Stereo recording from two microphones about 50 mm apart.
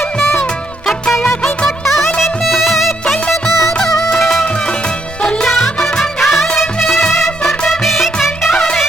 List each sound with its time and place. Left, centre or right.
0.2 s music: left
1.4 s music of bollywood: centre
2.2 s music: centre
5.5 s music: centre